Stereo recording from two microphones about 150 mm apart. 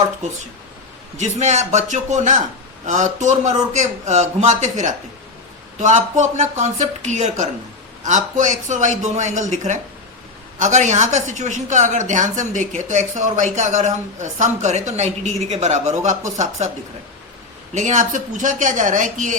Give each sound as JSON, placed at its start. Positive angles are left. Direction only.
{"t": 1.2, "sound": "a woman's voice", "side_deg": -50}
{"t": 17.7, "sound": "a man's voice", "side_deg": -55}